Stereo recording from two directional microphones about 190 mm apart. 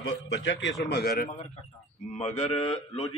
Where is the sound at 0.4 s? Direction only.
75° left (ahead or behind).